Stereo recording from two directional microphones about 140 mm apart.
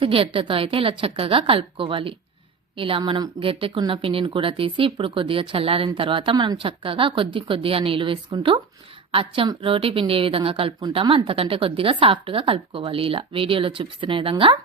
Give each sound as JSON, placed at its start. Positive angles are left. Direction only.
{"t": 0.0, "sound": "a woman's voice", "side_deg": -40}